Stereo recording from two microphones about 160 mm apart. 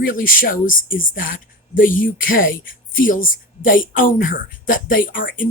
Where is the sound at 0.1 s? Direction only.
60° left (ahead or behind).